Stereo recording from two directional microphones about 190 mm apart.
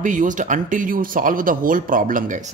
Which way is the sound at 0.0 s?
45° right (ahead or behind).